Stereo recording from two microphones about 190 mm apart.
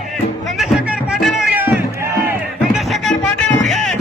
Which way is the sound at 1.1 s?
5° right (ahead or behind).